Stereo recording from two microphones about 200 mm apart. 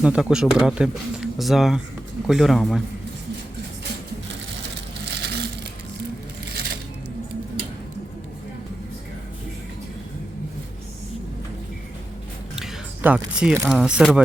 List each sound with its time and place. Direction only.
0.0 s speech: 5° right (ahead or behind)
5.0 s crushing: 55° right (ahead or behind)
12.5 s speech: 5° right (ahead or behind)